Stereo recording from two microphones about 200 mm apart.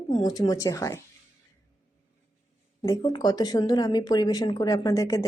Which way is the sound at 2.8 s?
20° left (ahead or behind).